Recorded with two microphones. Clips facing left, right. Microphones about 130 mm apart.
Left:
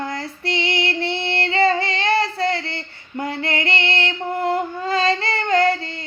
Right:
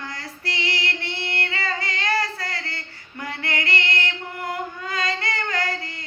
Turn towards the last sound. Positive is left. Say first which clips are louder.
# left 10 dB
turn(degrees=25)  # may be behind; listen again after turning